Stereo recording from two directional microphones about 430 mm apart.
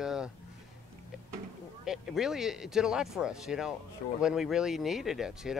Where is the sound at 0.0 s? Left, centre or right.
Centre.